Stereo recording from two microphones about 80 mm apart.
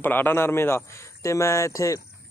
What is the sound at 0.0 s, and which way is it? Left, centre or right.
Speech, left.